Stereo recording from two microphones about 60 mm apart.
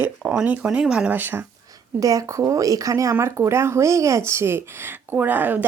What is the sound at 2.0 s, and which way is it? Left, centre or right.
Speech, right.